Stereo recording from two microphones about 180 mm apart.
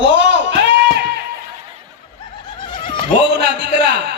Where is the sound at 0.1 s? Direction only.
80° right.